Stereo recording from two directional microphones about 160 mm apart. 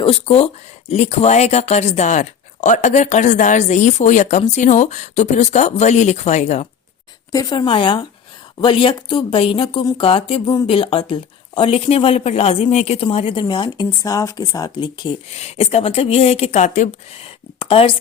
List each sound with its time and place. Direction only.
0.0 s speech: 40° left (ahead or behind)
7.3 s speech: 20° left (ahead or behind)
15.3 s speech: 40° left (ahead or behind)